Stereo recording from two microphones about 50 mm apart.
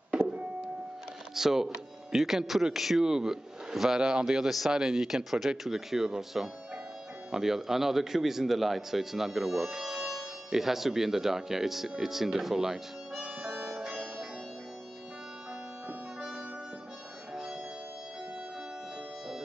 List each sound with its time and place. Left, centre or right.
1.3 s a man's voice: centre
13.4 s harmonica: right
13.7 s music: centre